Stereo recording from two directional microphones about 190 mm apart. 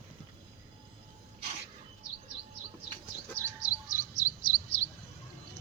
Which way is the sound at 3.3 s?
15° left (ahead or behind).